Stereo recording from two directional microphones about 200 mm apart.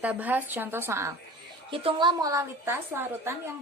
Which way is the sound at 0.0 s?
10° right (ahead or behind).